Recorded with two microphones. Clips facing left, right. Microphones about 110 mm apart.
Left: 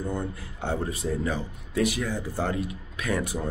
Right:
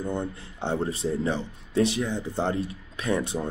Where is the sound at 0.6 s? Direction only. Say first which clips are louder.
Right 2 dB; 25° right (ahead or behind).